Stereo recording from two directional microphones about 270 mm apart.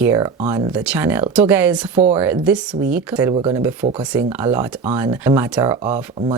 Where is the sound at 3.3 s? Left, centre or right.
Centre.